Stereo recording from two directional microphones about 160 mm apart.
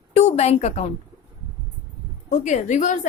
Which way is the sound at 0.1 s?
45° left (ahead or behind).